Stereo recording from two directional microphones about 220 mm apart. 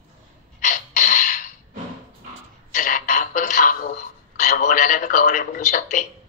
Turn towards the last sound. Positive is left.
turn(degrees=35)  # may be behind; listen again after turning